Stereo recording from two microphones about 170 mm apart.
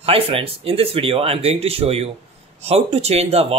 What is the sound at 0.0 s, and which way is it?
A man's voice, 35° right (ahead or behind).